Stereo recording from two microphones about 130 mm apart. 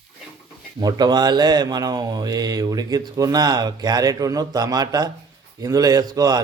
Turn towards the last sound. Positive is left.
turn(degrees=-30)  # may be behind; listen again after turning